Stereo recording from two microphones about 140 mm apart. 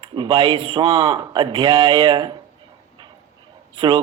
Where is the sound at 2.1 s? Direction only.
40° right (ahead or behind).